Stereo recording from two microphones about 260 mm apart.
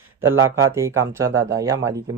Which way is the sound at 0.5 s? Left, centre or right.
Centre.